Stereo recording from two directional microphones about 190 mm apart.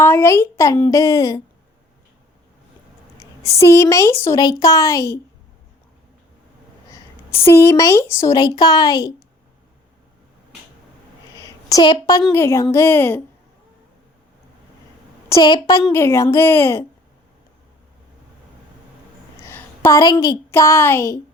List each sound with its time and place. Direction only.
0.0 s a woman's voice: 15° left (ahead or behind)
3.5 s a woman's voice: 15° left (ahead or behind)
6.9 s a woman's voice: 15° left (ahead or behind)
11.3 s a sound: 20° left (ahead or behind)
12.3 s a woman's voice: 15° left (ahead or behind)
15.3 s a woman's voice: 20° left (ahead or behind)
19.4 s a woman's voice: 10° left (ahead or behind)